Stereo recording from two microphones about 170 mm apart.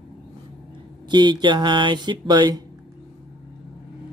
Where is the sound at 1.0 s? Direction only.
25° right (ahead or behind).